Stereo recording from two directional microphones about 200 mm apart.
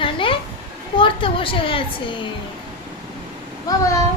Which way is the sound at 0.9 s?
25° left (ahead or behind).